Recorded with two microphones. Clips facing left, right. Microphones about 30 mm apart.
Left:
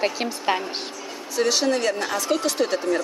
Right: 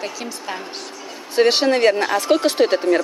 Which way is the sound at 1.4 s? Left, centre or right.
Right.